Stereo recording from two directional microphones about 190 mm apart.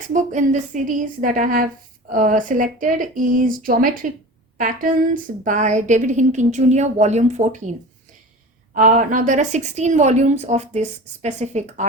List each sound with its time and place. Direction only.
0.0 s a woman's voice: 45° right (ahead or behind)
8.7 s a woman's voice: 40° right (ahead or behind)